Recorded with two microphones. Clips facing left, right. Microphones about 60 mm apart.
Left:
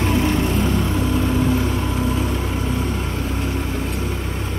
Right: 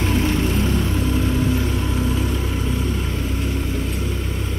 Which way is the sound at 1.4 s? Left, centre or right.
Left.